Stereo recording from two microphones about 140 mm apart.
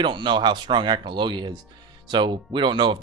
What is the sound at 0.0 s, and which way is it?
Speech, 35° right (ahead or behind).